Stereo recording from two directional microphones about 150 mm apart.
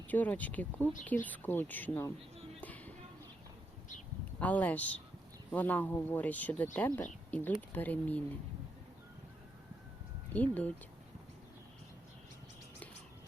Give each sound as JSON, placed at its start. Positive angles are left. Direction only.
{"t": 0.1, "sound": "speech", "side_deg": 10}
{"t": 2.6, "sound": "a sound", "side_deg": 10}
{"t": 4.4, "sound": "speech", "side_deg": 10}
{"t": 10.3, "sound": "speech", "side_deg": 10}